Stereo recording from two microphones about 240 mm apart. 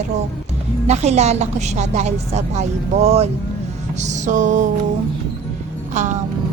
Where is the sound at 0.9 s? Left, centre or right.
Right.